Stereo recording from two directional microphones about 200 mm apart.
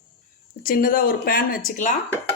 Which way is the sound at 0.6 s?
45° left (ahead or behind).